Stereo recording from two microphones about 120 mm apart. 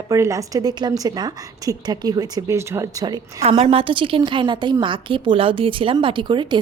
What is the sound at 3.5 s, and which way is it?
A woman's voice, 45° right (ahead or behind).